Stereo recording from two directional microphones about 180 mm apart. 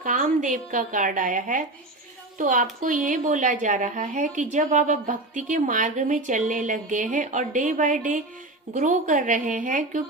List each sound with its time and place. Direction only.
0.0 s a woman's voice: 45° right (ahead or behind)